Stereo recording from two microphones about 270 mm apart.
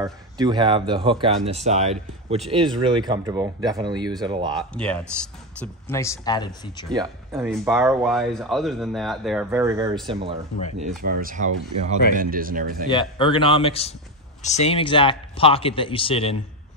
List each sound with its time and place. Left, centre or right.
0.0 s speech: centre
4.7 s speech: centre
6.9 s speech: centre
8.1 s speech: centre
10.8 s speech: right
12.9 s speech: centre